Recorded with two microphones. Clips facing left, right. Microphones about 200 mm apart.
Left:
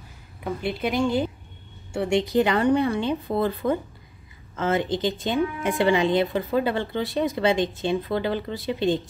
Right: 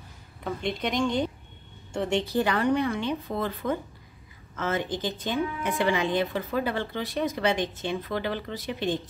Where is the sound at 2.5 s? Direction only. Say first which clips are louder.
Left 4 dB; 30° left (ahead or behind).